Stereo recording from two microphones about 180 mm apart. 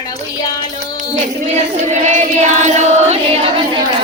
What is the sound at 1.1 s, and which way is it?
Choir, 40° right (ahead or behind).